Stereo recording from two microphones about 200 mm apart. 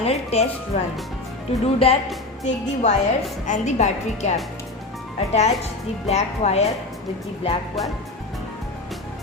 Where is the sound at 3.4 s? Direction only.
35° left (ahead or behind).